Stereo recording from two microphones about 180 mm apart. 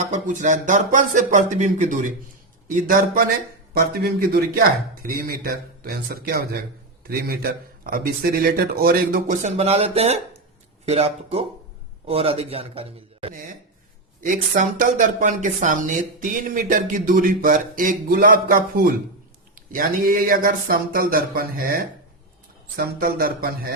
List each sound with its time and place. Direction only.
0.1 s a man's voice: 45° right (ahead or behind)
14.2 s speech: 45° right (ahead or behind)
22.8 s speech: 55° right (ahead or behind)